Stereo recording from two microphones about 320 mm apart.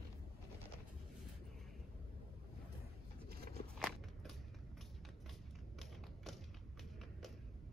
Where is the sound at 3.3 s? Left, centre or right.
Right.